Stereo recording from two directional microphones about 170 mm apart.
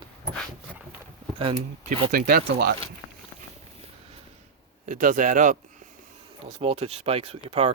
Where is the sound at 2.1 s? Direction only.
65° right (ahead or behind).